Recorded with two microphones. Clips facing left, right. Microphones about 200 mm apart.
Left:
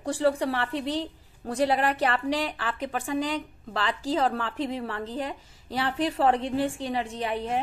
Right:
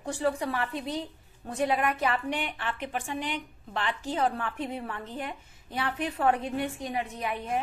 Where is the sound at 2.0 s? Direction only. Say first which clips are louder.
Left 3 dB; 80° left.